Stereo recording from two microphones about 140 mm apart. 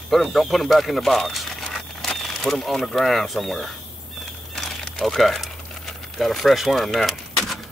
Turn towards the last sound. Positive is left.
turn(degrees=0)  # may be behind; listen again after turning